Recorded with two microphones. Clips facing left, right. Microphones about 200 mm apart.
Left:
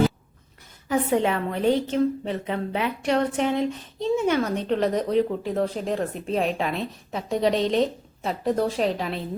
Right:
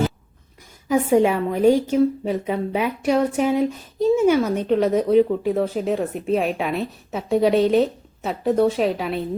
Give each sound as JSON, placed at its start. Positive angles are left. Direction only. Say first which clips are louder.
{"t": 0.9, "sound": "a woman's voice", "louder": "right 5 dB", "side_deg": -10}